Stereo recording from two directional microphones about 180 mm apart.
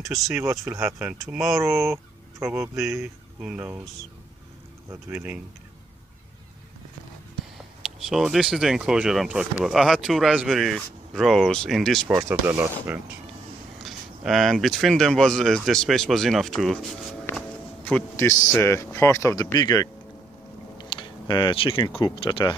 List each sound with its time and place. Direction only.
0.7 s speech: 15° right (ahead or behind)
1.2 s speech: centre (ahead or behind)
1.6 s speech: 15° right (ahead or behind)
2.9 s speech: 5° right (ahead or behind)
5.1 s speech: 10° right (ahead or behind)
7.5 s speech: centre (ahead or behind)
12.2 s speech: 10° right (ahead or behind)
13.8 s a man's voice: centre (ahead or behind); by 19.9 s 20° left (ahead or behind)
20.7 s a sound: 25° left (ahead or behind)
22.0 s speech: 30° left (ahead or behind)